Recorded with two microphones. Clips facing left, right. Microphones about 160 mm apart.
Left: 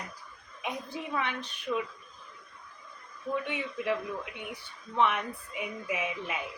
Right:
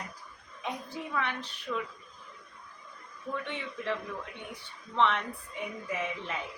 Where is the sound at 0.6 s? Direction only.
20° left (ahead or behind).